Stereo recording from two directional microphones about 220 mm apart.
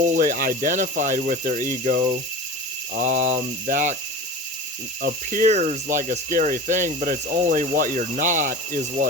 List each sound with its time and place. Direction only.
0.0 s speech: 35° right (ahead or behind)
5.0 s speech: 40° right (ahead or behind)